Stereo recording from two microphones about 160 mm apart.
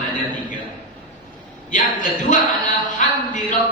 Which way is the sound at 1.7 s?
55° left (ahead or behind).